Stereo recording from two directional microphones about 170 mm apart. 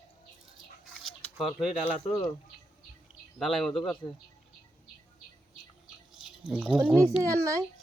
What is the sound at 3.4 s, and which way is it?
Speech, centre (ahead or behind).